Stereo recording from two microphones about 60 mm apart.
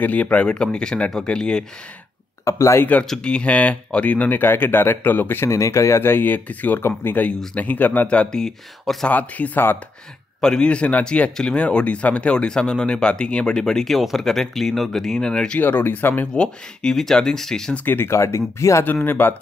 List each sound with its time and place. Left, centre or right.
0.0 s speech: left
2.4 s speech: left
2.8 s speech: left
5.5 s speech: left
6.0 s speech: left
8.1 s speech: centre
9.1 s speech: left
10.4 s speech: centre
15.6 s speech: left
16.3 s speech: centre
17.8 s speech: left
19.0 s speech: left